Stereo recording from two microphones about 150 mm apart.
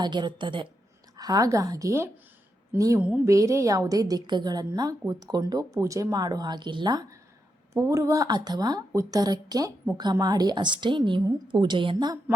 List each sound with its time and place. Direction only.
0.0 s a woman's voice: 30° right (ahead or behind)